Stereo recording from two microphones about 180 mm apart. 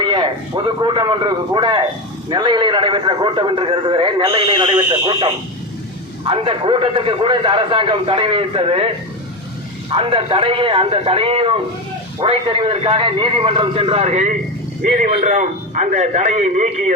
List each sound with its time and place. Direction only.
0.0 s a man's voice: 25° right (ahead or behind)
6.2 s a man's voice: 30° right (ahead or behind)
9.9 s a man's voice: 30° right (ahead or behind)